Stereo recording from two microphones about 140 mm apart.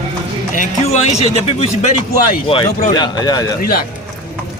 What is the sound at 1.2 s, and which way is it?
Speech, 45° left (ahead or behind).